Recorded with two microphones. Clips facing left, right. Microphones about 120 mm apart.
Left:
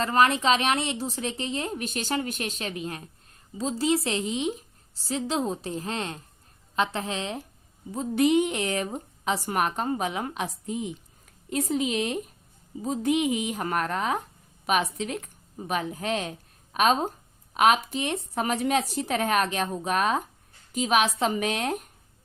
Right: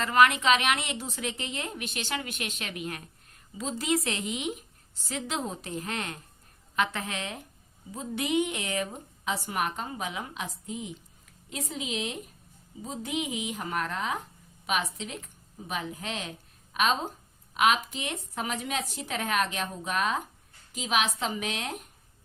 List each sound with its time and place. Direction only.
0.0 s a woman's voice: 35° left (ahead or behind)
11.4 s a woman's voice: 50° left (ahead or behind)